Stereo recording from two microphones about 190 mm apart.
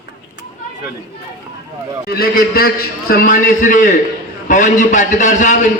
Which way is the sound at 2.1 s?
50° left (ahead or behind).